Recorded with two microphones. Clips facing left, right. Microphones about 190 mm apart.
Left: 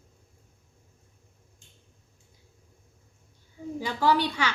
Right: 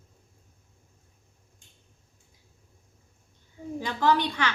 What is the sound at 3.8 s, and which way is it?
Speech, 10° left (ahead or behind).